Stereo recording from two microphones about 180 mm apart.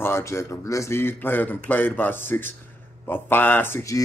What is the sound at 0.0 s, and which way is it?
A man's voice, 15° left (ahead or behind).